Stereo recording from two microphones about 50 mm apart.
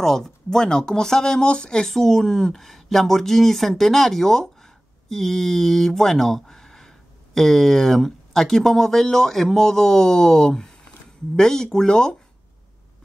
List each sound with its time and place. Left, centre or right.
0.0 s speech: centre